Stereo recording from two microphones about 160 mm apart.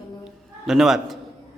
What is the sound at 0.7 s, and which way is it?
Speech, 5° right (ahead or behind).